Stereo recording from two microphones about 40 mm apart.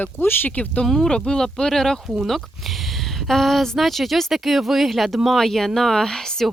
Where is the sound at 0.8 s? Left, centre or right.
Centre.